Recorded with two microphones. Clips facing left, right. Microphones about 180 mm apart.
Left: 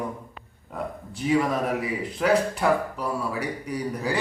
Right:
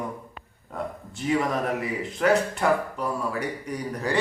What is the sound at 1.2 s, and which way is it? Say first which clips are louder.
A man's voice: left 2 dB; 5° left (ahead or behind).